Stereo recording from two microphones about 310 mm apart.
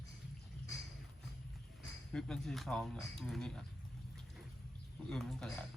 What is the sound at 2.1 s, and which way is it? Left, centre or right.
Speech, centre.